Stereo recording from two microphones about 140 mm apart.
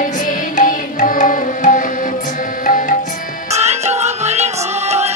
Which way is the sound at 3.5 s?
50° right (ahead or behind).